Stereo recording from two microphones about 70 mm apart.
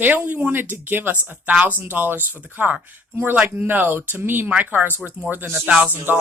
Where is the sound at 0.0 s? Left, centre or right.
Right.